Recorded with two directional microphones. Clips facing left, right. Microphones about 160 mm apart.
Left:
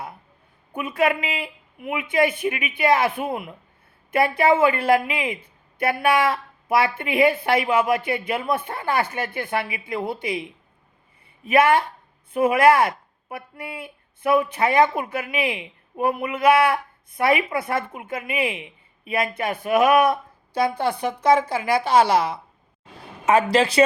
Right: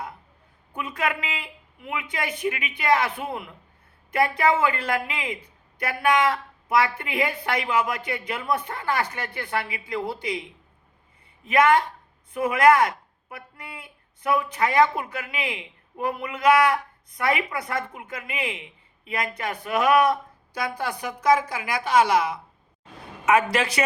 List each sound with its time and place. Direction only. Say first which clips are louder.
0.7 s speech: left 6 dB; 20° left (ahead or behind)
11.4 s speech: left 2 dB; 25° left (ahead or behind)